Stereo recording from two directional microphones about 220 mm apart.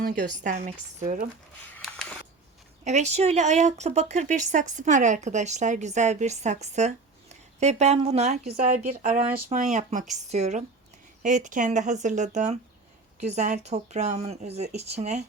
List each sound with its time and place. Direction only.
0.0 s speech: 35° right (ahead or behind)
1.7 s a sound: 5° left (ahead or behind)
2.8 s speech: 30° right (ahead or behind)